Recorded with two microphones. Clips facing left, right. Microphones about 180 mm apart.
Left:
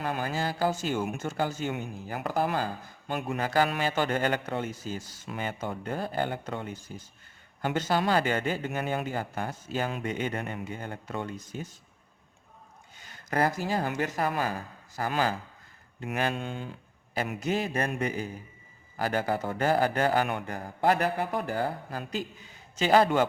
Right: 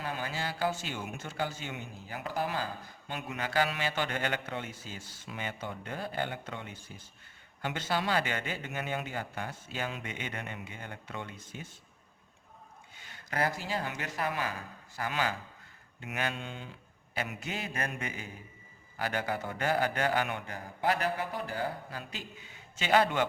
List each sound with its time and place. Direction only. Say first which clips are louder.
0.0 s speech: left 6 dB; 50° left (ahead or behind)
13.0 s a man's voice: left 5 dB; 45° left (ahead or behind)